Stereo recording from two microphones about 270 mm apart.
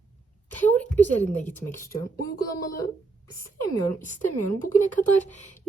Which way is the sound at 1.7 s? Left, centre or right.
Centre.